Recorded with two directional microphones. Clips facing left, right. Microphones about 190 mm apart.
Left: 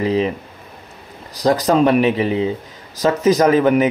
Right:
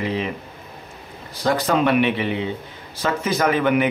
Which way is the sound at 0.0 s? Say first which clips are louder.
Left 7 dB; 35° left (ahead or behind).